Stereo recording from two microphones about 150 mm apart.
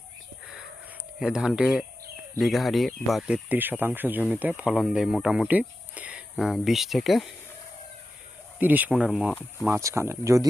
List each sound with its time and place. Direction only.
1.2 s speech: 5° right (ahead or behind)
8.5 s speech: 10° right (ahead or behind)
9.6 s speech: 15° right (ahead or behind)